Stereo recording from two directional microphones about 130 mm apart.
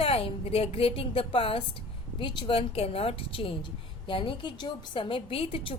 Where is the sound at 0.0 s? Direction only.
50° left (ahead or behind).